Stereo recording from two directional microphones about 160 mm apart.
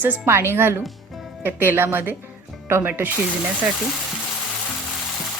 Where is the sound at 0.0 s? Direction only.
15° right (ahead or behind).